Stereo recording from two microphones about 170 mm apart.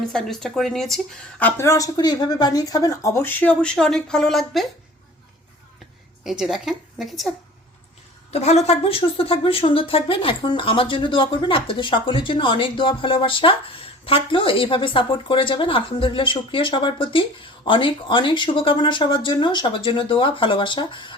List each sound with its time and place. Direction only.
0.1 s speech: centre (ahead or behind)
6.2 s a woman's voice: centre (ahead or behind)
8.3 s speech: 40° left (ahead or behind)